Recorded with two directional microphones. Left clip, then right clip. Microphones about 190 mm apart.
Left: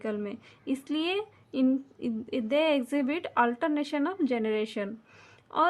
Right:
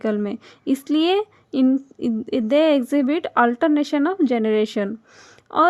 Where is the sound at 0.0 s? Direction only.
40° right (ahead or behind).